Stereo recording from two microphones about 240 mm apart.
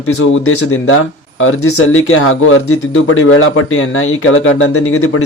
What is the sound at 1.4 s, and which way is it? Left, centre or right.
Speech, left.